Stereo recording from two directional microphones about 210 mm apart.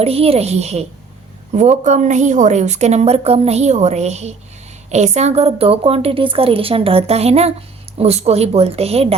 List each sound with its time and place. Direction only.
0.0 s a woman's voice: 30° right (ahead or behind)